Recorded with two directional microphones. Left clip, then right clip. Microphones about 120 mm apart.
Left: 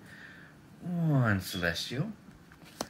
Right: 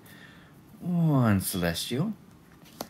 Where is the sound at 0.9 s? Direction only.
30° right (ahead or behind).